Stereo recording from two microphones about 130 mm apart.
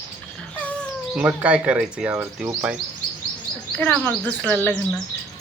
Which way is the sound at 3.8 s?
10° left (ahead or behind).